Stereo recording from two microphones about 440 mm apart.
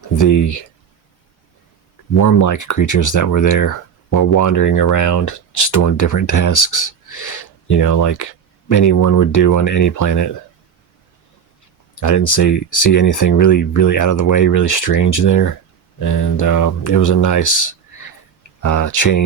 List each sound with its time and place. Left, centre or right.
0.2 s speech: left
2.1 s speech: left
11.9 s speech: left